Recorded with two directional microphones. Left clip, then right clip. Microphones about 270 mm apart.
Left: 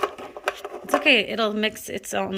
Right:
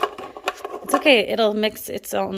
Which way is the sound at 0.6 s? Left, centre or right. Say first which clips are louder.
Right 3 dB; centre.